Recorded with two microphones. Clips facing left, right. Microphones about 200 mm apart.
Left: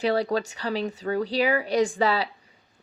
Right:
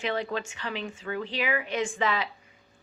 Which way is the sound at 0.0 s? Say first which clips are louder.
Left 6 dB; 35° left (ahead or behind).